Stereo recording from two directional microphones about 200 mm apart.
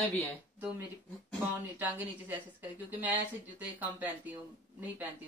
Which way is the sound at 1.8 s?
10° right (ahead or behind).